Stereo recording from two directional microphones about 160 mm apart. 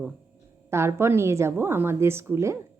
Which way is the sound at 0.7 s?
15° right (ahead or behind).